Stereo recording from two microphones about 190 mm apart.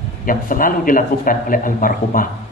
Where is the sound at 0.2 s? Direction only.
45° left (ahead or behind).